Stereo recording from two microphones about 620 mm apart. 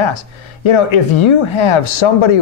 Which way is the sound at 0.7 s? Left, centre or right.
Left.